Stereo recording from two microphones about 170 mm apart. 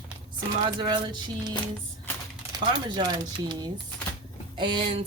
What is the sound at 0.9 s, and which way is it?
Speech, 25° right (ahead or behind).